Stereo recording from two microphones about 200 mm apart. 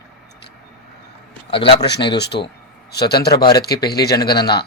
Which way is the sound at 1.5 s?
25° left (ahead or behind).